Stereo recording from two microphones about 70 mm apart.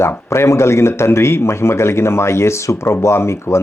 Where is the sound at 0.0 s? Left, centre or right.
Left.